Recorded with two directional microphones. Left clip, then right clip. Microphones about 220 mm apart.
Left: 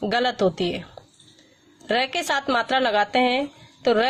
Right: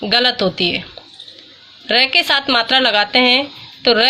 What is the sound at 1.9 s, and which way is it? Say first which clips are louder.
A woman's voice: right 9 dB; 25° left (ahead or behind).